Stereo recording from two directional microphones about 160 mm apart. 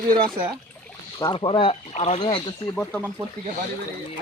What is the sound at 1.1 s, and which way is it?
Speech, 30° left (ahead or behind).